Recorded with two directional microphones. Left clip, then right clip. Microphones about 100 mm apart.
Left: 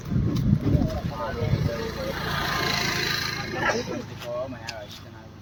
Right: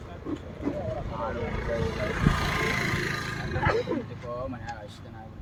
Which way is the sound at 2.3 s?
35° left (ahead or behind).